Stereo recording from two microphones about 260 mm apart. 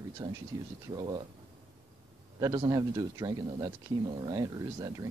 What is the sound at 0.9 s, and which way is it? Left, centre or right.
Speech, centre.